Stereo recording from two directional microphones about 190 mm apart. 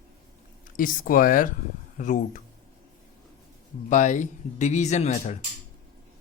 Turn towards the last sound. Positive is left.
turn(degrees=35)  # may be behind; listen again after turning